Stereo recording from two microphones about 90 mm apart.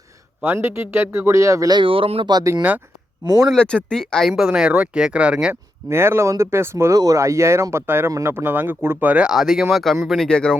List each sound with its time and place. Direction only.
0.4 s speech: 25° right (ahead or behind)
1.7 s speech: 80° right
3.5 s speech: 10° left (ahead or behind); by 5.5 s 10° right (ahead or behind)
5.9 s speech: 30° right (ahead or behind)
6.9 s speech: 40° right (ahead or behind); by 10.2 s centre (ahead or behind)
10.2 s speech: 10° left (ahead or behind)